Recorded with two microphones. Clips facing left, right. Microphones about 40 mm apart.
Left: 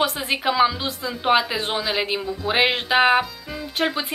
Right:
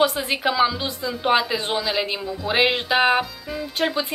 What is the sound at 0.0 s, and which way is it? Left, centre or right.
Speech, centre.